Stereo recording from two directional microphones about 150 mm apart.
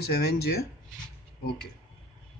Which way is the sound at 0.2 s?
90° left.